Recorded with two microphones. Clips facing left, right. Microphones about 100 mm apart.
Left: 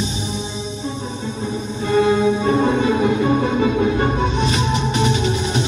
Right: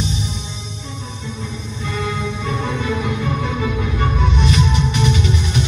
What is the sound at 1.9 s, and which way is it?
Music, 50° left (ahead or behind).